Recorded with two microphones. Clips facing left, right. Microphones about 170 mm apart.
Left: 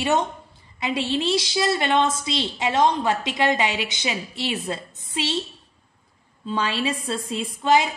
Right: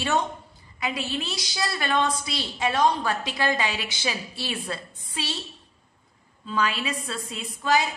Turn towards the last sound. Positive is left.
turn(degrees=25)  # may be behind; listen again after turning